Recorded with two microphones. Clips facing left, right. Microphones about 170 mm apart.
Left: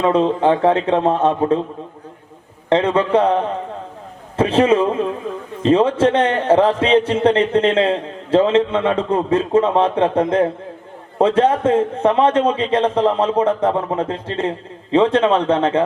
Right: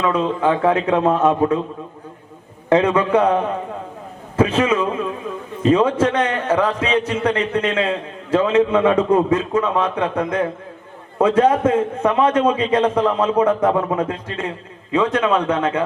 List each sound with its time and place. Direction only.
0.0 s a man's voice: 30° left (ahead or behind)
2.6 s a man's voice: 30° left (ahead or behind)